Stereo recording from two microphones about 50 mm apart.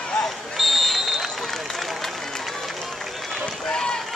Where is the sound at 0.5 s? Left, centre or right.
Centre.